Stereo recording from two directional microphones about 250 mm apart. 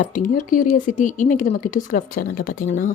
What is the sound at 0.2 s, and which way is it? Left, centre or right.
A woman's voice, left.